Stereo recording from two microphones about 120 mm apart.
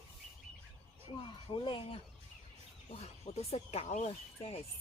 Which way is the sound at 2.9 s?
60° left (ahead or behind).